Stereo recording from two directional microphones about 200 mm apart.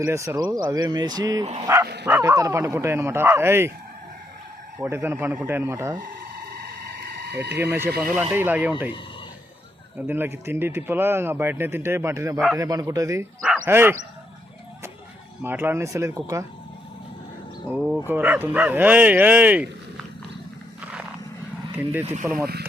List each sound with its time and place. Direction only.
0.0 s speech: 15° right (ahead or behind)
4.8 s speech: 10° right (ahead or behind)
6.5 s a sound: 50° right (ahead or behind)
7.6 s speech: 10° right (ahead or behind)
10.1 s speech: 10° right (ahead or behind)
15.4 s speech: 10° right (ahead or behind)
17.7 s speech: 5° right (ahead or behind)
20.8 s a sound: 5° right (ahead or behind)
22.2 s speech: 15° right (ahead or behind)